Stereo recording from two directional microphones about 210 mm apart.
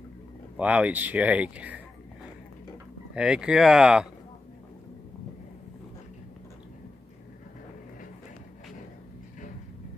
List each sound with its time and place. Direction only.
0.6 s speech: 5° right (ahead or behind)
3.2 s speech: 5° right (ahead or behind)